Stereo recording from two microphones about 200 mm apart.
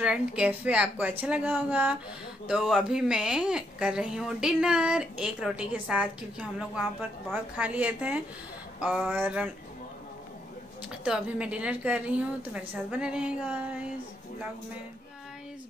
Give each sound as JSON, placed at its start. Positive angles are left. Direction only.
{"t": 0.0, "sound": "a woman's voice", "side_deg": -5}
{"t": 10.9, "sound": "speech", "side_deg": -5}